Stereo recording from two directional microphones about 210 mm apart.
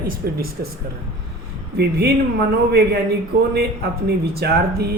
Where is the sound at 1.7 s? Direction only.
50° right (ahead or behind).